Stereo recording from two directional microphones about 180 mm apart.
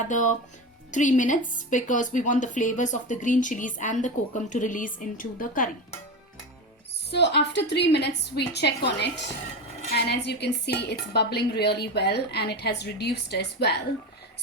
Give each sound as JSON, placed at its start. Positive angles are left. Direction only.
{"t": 0.0, "sound": "speech", "side_deg": 45}
{"t": 7.1, "sound": "a woman's voice", "side_deg": 70}